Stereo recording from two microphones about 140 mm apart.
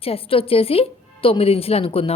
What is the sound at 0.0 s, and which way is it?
Speech, 40° left (ahead or behind).